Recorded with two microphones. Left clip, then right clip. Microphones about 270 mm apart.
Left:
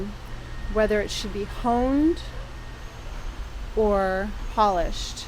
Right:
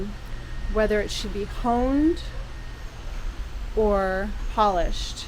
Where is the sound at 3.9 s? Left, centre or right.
Centre.